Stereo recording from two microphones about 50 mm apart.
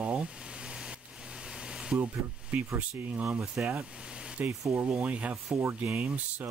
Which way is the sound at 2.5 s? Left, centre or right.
Right.